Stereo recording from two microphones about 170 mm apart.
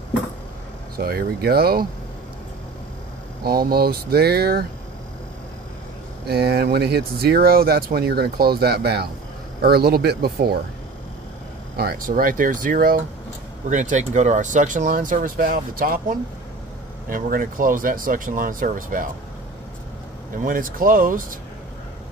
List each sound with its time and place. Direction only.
0.9 s speech: 65° right (ahead or behind)
3.4 s speech: 60° right (ahead or behind)
6.2 s speech: 70° right (ahead or behind)
11.7 s speech: 65° right (ahead or behind)
20.4 s speech: 55° right (ahead or behind)